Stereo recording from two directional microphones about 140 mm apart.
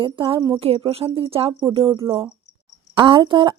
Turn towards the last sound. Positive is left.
turn(degrees=-35)  # may be behind; listen again after turning